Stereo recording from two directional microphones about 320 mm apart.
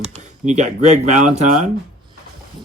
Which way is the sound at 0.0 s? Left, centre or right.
Right.